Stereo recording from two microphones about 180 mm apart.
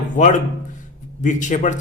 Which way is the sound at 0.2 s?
45° left (ahead or behind).